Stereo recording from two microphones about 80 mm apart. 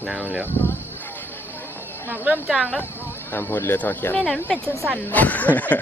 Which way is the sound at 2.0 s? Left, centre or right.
Right.